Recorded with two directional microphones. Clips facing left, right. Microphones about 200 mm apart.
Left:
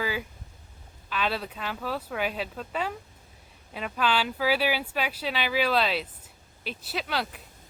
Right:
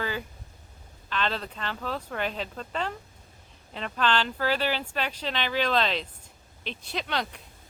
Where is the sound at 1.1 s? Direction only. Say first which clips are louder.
Left 1 dB; 10° left (ahead or behind).